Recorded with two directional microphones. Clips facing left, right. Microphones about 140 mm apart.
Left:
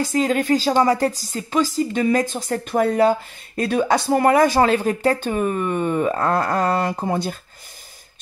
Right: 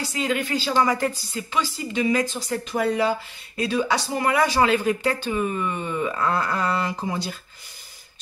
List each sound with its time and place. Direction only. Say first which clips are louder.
0.0 s speech: left 6 dB; 45° left (ahead or behind)